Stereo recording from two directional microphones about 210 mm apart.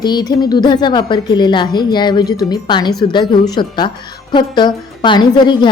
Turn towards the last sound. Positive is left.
turn(degrees=20)  # may be behind; listen again after turning